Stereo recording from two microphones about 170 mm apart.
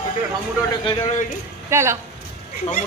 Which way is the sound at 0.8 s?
30° left (ahead or behind).